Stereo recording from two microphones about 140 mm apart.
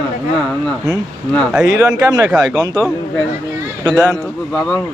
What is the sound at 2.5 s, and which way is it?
Speech, 25° right (ahead or behind).